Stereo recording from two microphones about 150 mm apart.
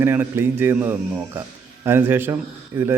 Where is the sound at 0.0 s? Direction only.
15° right (ahead or behind).